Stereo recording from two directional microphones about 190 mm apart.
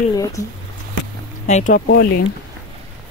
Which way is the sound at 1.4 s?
40° left (ahead or behind).